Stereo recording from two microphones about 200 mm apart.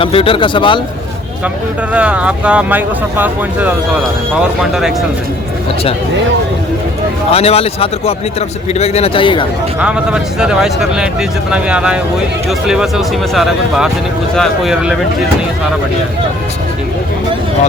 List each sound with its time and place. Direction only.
0.0 s a man's voice: 25° left (ahead or behind)
1.9 s speech: 5° right (ahead or behind)
7.3 s a man's voice: 30° left (ahead or behind)
9.8 s speech: 5° right (ahead or behind)